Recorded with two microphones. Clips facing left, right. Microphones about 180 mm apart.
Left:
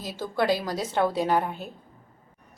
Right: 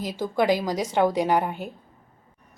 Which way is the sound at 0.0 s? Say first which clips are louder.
Right 3 dB; 15° right (ahead or behind).